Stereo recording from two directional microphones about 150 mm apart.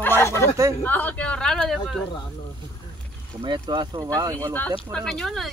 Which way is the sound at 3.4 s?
30° right (ahead or behind).